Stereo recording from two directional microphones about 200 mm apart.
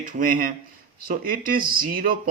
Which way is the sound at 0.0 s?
45° right (ahead or behind).